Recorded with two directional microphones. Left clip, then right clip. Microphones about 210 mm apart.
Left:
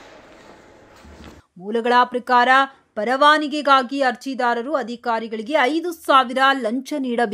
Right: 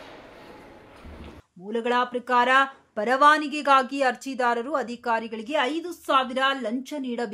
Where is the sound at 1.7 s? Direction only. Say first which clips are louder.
Left 7 dB; 30° left (ahead or behind).